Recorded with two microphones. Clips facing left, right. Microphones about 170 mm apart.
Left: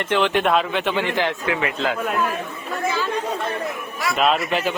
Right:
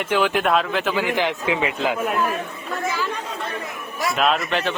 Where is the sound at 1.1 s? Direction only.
15° right (ahead or behind).